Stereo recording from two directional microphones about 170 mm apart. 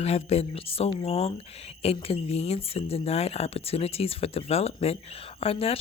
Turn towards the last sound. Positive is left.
turn(degrees=35)  # may be behind; listen again after turning